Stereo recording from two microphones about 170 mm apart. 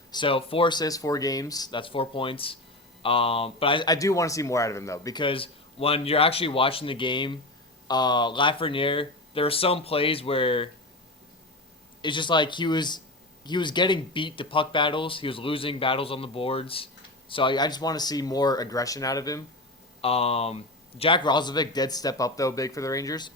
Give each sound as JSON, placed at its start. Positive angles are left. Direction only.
{"t": 0.1, "sound": "speech", "side_deg": 30}
{"t": 12.0, "sound": "speech", "side_deg": 30}
{"t": 20.0, "sound": "speech", "side_deg": 35}